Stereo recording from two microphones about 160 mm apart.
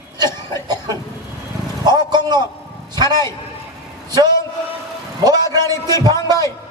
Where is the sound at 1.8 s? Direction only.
25° right (ahead or behind).